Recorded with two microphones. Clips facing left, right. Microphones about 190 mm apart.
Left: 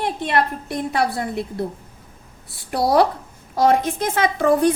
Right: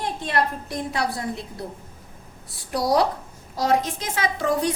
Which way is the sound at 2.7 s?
60° left (ahead or behind).